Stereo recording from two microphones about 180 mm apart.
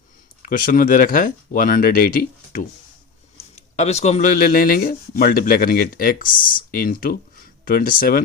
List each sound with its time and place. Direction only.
0.4 s speech: 50° left (ahead or behind)
3.5 s speech: 40° left (ahead or behind)